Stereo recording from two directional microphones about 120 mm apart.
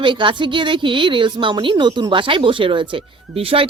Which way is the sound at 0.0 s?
45° right (ahead or behind).